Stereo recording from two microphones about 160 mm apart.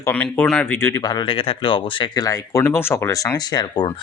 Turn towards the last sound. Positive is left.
turn(degrees=25)  # may be behind; listen again after turning